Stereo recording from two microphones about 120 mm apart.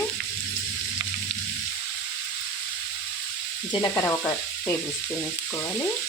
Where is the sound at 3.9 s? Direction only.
20° left (ahead or behind).